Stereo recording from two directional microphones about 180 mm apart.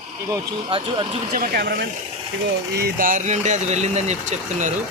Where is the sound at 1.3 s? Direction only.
55° right (ahead or behind).